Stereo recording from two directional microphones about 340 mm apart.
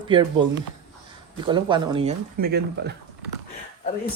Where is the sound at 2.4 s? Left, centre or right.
Right.